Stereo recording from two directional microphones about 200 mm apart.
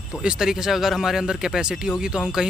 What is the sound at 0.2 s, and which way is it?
Speech, 5° right (ahead or behind).